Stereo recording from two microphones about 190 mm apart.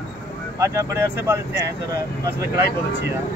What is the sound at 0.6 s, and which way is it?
Speech, 15° right (ahead or behind).